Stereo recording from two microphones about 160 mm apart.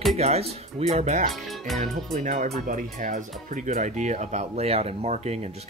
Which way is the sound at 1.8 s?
55° right (ahead or behind).